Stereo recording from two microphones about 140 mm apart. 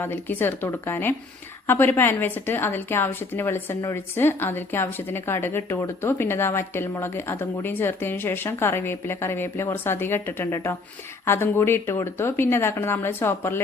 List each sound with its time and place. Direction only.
0.0 s a woman's voice: 15° left (ahead or behind)